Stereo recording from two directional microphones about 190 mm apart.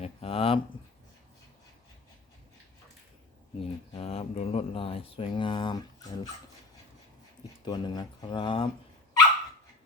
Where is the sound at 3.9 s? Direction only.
30° left (ahead or behind).